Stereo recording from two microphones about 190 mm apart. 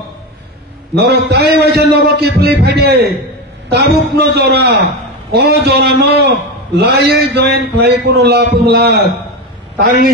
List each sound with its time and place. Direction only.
0.9 s a man's voice: 60° right (ahead or behind)